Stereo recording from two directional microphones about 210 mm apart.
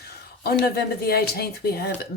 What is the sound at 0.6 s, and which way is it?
Speech, 50° left (ahead or behind).